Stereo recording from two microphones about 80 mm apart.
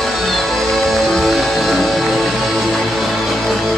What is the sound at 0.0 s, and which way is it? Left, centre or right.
Music, centre.